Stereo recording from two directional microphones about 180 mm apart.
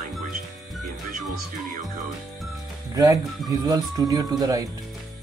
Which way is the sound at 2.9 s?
20° right (ahead or behind).